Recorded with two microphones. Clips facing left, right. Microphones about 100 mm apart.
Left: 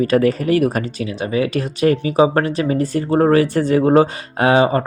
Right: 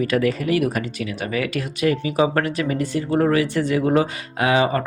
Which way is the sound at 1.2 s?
25° left (ahead or behind).